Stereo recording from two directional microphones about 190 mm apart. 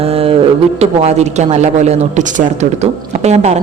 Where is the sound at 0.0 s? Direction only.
30° right (ahead or behind).